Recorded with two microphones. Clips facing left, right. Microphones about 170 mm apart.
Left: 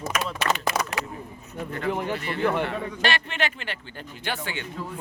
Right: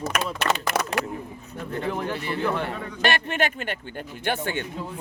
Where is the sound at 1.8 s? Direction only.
15° left (ahead or behind).